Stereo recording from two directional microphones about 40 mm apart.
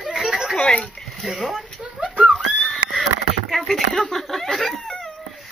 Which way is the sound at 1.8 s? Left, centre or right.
Right.